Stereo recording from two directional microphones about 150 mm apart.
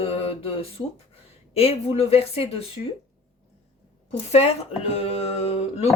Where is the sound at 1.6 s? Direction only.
40° left (ahead or behind).